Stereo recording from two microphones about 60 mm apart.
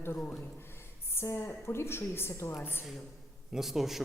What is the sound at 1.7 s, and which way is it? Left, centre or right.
A woman's voice, left.